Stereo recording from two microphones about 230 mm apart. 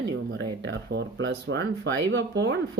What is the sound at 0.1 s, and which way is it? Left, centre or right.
Speech, right.